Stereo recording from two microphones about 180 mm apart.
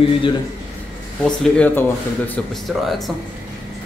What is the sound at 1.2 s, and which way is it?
Speech, 5° left (ahead or behind).